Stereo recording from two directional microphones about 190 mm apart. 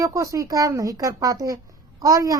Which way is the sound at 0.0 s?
15° right (ahead or behind).